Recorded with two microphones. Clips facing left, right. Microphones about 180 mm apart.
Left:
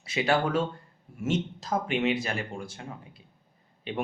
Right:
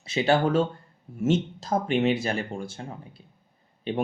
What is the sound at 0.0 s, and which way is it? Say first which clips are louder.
Speech: right 4 dB; 25° right (ahead or behind).